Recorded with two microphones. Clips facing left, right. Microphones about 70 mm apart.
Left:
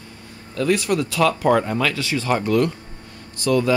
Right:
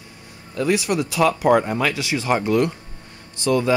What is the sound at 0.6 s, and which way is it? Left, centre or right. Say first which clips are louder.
Speech: left 1 dB; centre.